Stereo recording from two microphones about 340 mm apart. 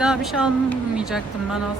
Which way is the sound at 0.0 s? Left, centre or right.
Centre.